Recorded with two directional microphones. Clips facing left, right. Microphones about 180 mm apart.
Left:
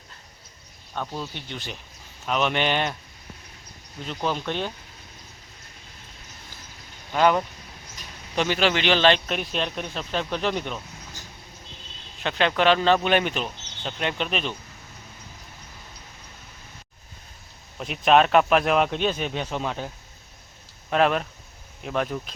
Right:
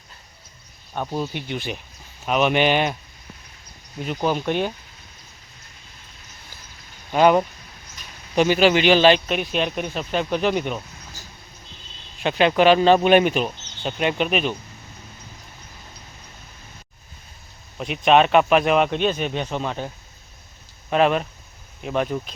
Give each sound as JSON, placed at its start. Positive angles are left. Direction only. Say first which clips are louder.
{"t": 0.9, "sound": "speech", "louder": "right 6 dB", "side_deg": -20}
{"t": 4.0, "sound": "speech", "louder": "right 5 dB", "side_deg": -10}
{"t": 7.1, "sound": "speech", "louder": "right 4 dB", "side_deg": -15}
{"t": 17.7, "sound": "speech", "louder": "right 2 dB", "side_deg": 0}
{"t": 20.9, "sound": "speech", "louder": "right 3 dB", "side_deg": 0}